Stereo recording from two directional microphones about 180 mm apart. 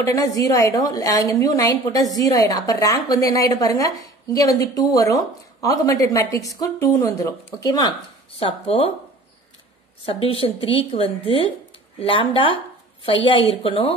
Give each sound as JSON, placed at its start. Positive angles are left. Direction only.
{"t": 0.1, "sound": "a woman's voice", "side_deg": 15}
{"t": 10.0, "sound": "a woman's voice", "side_deg": 30}